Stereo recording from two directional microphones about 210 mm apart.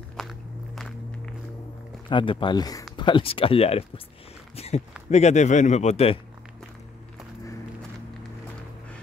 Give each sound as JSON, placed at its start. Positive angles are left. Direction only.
{"t": 0.2, "sound": "walk", "side_deg": 0}
{"t": 2.0, "sound": "speech", "side_deg": 25}